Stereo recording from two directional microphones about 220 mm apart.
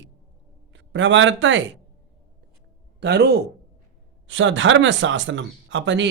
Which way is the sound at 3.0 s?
50° right (ahead or behind).